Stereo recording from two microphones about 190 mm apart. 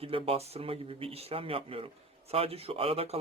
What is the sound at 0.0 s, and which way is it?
Speech, 30° right (ahead or behind).